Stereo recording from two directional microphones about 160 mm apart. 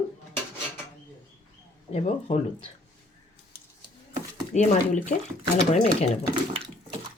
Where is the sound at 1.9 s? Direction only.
40° left (ahead or behind).